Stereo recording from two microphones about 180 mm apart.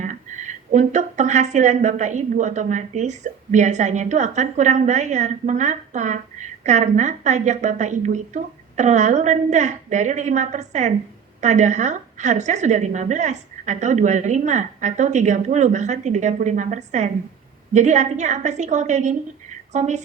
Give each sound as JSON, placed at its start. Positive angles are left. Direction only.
{"t": 0.0, "sound": "a woman's voice", "side_deg": -40}